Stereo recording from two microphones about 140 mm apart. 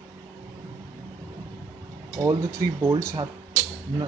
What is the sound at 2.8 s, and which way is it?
Speech, 20° right (ahead or behind).